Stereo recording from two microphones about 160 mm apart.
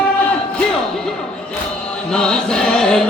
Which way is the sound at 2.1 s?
5° left (ahead or behind).